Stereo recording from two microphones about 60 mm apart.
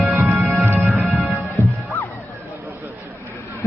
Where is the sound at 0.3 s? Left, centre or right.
Right.